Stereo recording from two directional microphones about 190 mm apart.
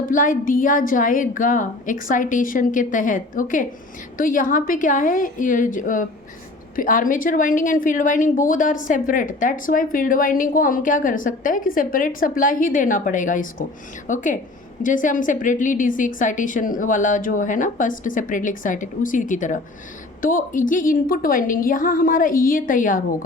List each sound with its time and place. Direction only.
0.0 s a woman's voice: 45° left (ahead or behind)